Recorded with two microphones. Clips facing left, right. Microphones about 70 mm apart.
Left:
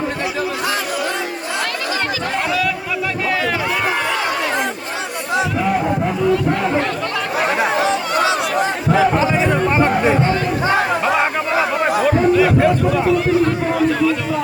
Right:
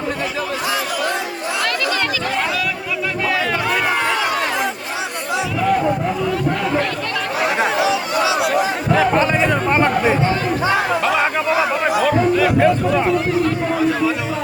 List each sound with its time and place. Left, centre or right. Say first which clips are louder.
7.8 s chatter: left 1 dB; left
9.0 s music: even; right